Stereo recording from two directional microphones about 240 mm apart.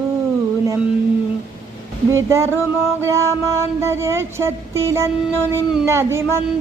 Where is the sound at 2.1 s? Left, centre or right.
Centre.